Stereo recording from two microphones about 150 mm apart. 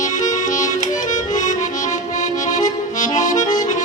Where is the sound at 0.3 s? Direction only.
55° left (ahead or behind).